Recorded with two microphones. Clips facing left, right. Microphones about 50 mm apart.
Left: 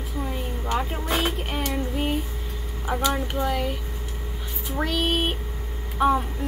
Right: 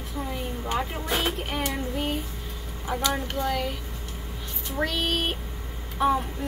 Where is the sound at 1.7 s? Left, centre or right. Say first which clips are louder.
Left 2 dB; centre.